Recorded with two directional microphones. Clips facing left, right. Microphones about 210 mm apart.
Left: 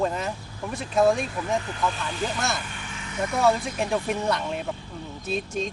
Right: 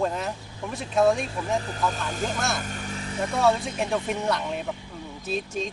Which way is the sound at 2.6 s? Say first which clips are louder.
Right 5 dB; 40° right (ahead or behind).